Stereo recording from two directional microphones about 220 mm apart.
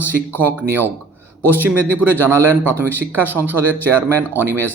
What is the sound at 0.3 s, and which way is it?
Speech, 10° right (ahead or behind).